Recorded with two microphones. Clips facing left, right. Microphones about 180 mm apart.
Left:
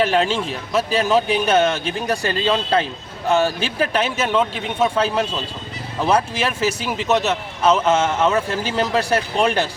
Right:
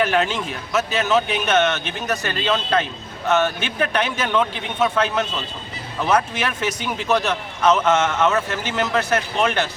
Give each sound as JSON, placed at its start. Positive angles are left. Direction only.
{"t": 0.0, "sound": "speech", "side_deg": 30}